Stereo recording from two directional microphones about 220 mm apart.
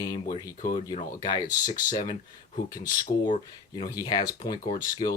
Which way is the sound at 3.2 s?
35° left (ahead or behind).